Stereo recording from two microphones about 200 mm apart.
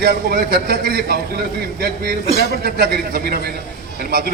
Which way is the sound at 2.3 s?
55° right (ahead or behind).